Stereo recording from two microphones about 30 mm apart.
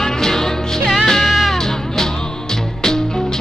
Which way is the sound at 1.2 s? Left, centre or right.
Centre.